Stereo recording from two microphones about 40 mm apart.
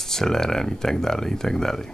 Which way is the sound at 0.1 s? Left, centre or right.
Centre.